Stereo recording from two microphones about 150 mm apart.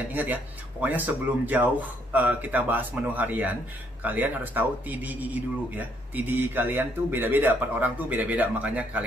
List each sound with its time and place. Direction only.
0.1 s speech: 10° right (ahead or behind)